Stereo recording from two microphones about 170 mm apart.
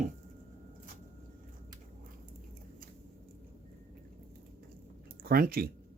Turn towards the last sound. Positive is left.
turn(degrees=-60)  # may be behind; listen again after turning